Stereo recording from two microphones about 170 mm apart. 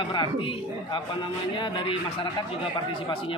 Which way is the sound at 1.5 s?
30° left (ahead or behind).